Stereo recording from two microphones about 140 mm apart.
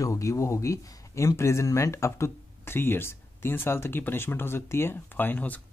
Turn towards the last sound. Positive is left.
turn(degrees=10)  # may be behind; listen again after turning